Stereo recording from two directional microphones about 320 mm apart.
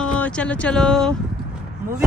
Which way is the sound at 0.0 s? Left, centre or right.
Centre.